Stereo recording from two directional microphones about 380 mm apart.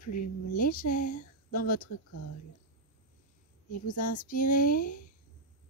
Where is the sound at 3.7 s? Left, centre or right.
Left.